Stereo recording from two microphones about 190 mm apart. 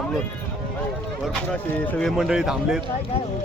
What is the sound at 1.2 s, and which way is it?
Speech, 5° left (ahead or behind).